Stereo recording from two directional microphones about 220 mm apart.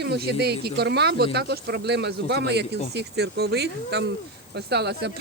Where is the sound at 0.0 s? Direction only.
50° right (ahead or behind).